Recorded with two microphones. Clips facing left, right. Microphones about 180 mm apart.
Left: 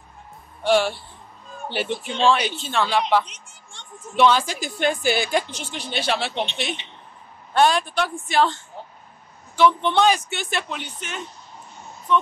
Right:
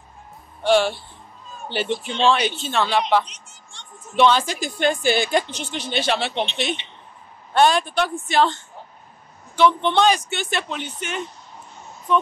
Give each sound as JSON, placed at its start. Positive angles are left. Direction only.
{"t": 0.7, "sound": "speech", "side_deg": 5}
{"t": 9.9, "sound": "speech", "side_deg": 5}